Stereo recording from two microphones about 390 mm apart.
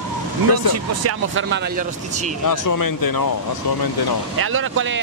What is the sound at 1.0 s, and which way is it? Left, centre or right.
Speech, right.